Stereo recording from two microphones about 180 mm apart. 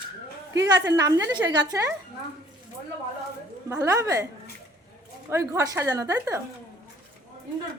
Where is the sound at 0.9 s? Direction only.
20° right (ahead or behind).